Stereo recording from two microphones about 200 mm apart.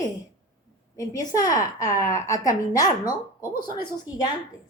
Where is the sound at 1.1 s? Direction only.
15° left (ahead or behind).